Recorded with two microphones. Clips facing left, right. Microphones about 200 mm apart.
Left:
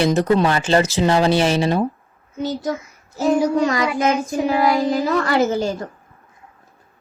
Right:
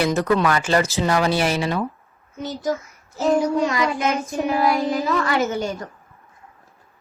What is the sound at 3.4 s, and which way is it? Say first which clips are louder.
A child's voice: left 2 dB; 40° left (ahead or behind).